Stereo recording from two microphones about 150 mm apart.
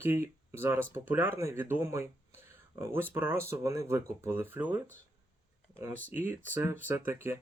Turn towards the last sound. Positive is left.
turn(degrees=-15)  # may be behind; listen again after turning